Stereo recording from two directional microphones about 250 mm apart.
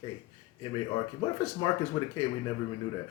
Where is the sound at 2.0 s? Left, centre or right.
Centre.